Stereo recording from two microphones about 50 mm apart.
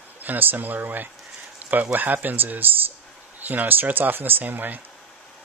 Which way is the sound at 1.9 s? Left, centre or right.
Right.